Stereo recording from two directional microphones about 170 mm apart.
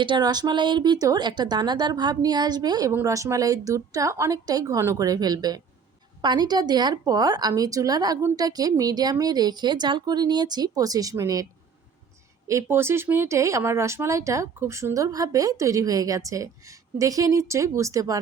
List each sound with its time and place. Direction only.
0.0 s speech: 25° right (ahead or behind)
12.5 s speech: 15° right (ahead or behind)